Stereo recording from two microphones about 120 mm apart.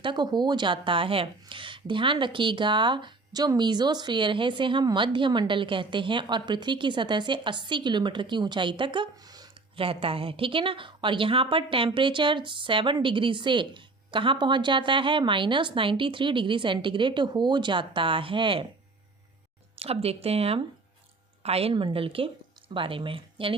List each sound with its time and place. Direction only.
0.0 s speech: 40° right (ahead or behind)
9.7 s a woman's voice: 50° right (ahead or behind)
19.7 s a woman's voice: 55° right (ahead or behind)